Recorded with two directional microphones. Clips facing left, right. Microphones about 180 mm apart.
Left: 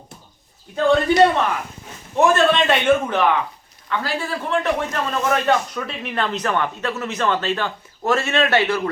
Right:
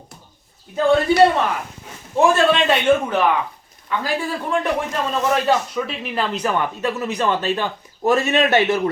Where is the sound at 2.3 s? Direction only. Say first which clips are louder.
Even; 5° right (ahead or behind).